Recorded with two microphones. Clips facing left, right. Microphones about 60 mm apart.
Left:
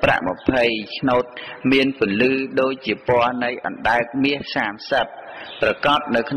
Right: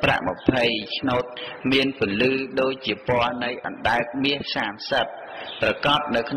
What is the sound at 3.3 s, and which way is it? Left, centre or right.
Speech, left.